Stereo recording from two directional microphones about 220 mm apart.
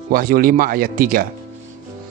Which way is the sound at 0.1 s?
40° right (ahead or behind).